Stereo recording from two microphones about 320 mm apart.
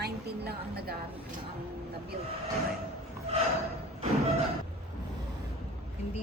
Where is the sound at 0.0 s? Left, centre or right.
Right.